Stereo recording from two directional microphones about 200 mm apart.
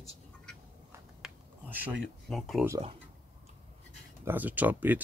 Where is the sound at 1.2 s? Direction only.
5° right (ahead or behind).